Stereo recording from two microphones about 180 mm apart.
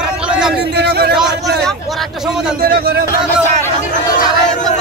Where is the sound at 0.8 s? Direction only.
65° right (ahead or behind).